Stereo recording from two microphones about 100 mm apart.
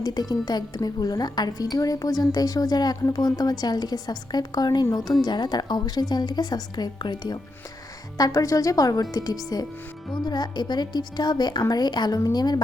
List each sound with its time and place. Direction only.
0.0 s a woman's voice: 40° left (ahead or behind)